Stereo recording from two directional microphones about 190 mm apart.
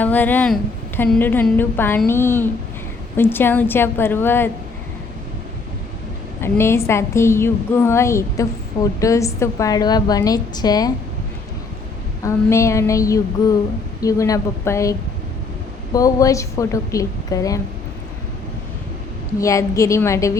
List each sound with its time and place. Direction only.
0.0 s a woman's voice: 10° left (ahead or behind)
6.4 s a woman's voice: 15° left (ahead or behind)
12.2 s a woman's voice: 15° left (ahead or behind)
19.4 s a woman's voice: 15° left (ahead or behind)